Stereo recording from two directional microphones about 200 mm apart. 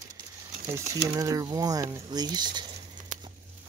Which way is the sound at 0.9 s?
15° right (ahead or behind).